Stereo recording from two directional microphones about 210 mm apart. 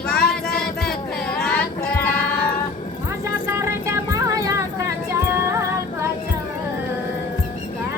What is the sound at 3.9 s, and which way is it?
Music, 15° right (ahead or behind).